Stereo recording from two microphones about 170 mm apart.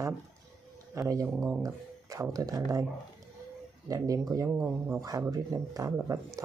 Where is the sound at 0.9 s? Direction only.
20° right (ahead or behind).